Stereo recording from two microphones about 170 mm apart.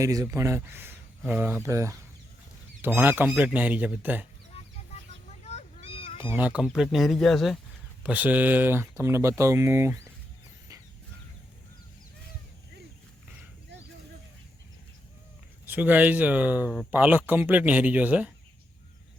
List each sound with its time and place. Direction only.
0.0 s speech: 20° right (ahead or behind)
5.4 s a sound: 40° left (ahead or behind)
6.2 s speech: 10° right (ahead or behind)
8.0 s speech: 10° right (ahead or behind)
15.6 s speech: 10° right (ahead or behind)